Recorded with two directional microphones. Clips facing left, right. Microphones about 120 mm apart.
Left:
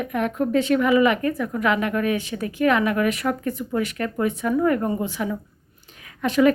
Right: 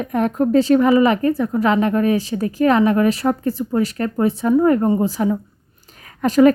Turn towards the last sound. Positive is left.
turn(degrees=-40)  # may be behind; listen again after turning